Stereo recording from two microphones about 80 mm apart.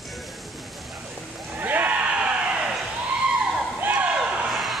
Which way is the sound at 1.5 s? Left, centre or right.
Right.